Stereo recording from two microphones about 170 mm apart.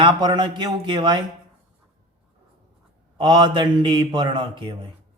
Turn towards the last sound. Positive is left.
turn(degrees=-30)  # may be behind; listen again after turning